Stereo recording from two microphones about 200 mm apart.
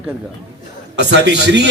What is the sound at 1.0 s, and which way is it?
Speech, 60° right (ahead or behind).